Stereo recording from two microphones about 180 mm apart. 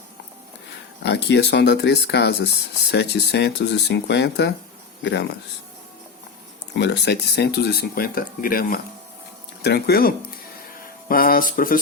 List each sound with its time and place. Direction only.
1.0 s speech: 70° left (ahead or behind)
6.7 s speech: 70° left (ahead or behind); by 8.8 s 55° left (ahead or behind)
9.6 s speech: 65° left (ahead or behind)